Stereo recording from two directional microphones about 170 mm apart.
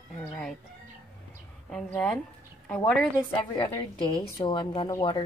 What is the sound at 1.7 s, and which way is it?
A woman's voice, 5° left (ahead or behind).